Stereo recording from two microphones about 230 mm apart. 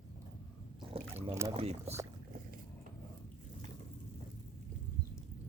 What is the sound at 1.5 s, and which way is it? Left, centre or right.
Speech, right.